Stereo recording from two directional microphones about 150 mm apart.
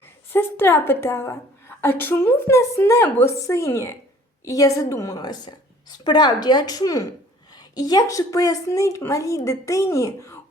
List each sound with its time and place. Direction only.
0.3 s a woman's voice: 15° left (ahead or behind)